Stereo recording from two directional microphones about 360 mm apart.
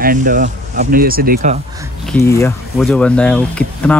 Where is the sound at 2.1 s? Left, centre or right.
Centre.